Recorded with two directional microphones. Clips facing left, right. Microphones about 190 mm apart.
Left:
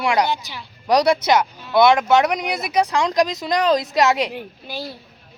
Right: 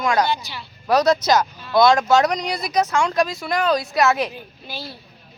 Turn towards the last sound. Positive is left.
turn(degrees=15)  # may be behind; listen again after turning